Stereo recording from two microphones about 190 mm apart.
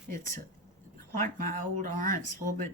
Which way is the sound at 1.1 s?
45° right (ahead or behind).